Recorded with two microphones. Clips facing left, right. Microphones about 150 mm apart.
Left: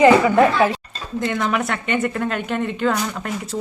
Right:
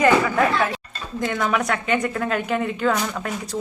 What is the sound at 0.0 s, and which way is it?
Speech, 25° left (ahead or behind).